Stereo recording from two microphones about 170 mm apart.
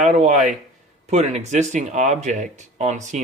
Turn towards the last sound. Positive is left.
turn(degrees=-45)  # may be behind; listen again after turning